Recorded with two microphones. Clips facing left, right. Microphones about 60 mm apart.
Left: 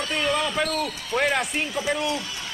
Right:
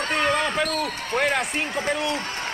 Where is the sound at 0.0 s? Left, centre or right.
Right.